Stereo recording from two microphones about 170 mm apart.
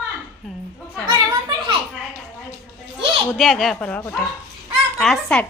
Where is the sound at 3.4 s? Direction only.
Centre (ahead or behind).